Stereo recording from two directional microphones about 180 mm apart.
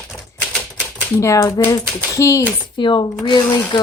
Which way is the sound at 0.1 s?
5° left (ahead or behind).